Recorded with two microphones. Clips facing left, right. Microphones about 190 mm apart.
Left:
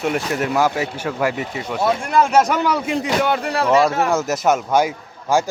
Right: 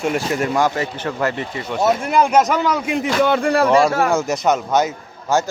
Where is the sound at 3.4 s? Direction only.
55° right (ahead or behind).